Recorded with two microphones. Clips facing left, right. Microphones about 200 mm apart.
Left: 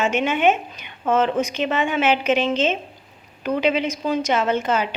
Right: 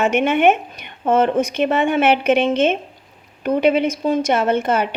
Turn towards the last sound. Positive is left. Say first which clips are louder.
# right 3 dB
turn(degrees=-55)  # may be behind; listen again after turning